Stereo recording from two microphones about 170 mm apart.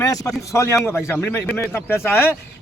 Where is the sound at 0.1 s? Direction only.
20° left (ahead or behind).